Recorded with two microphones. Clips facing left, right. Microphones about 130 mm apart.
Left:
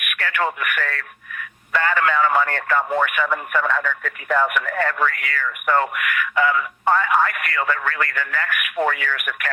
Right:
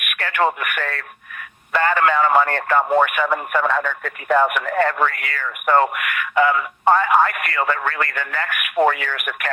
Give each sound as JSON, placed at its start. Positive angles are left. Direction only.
{"t": 0.4, "sound": "speech", "side_deg": -30}
{"t": 1.8, "sound": "speech", "side_deg": -40}
{"t": 2.6, "sound": "speech", "side_deg": -30}